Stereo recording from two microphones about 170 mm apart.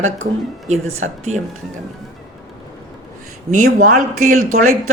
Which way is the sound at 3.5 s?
50° right (ahead or behind).